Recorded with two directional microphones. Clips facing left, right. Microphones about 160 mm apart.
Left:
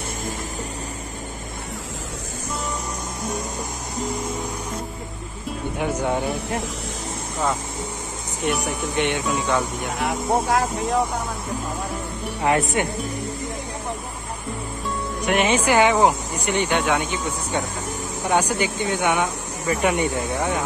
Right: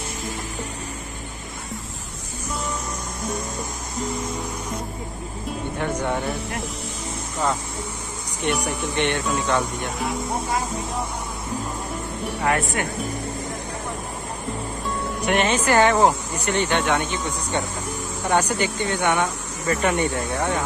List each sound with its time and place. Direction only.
5.8 s speech: 10° left (ahead or behind)
8.5 s speech: centre (ahead or behind)
9.9 s speech: 80° left
15.2 s speech: 10° left (ahead or behind)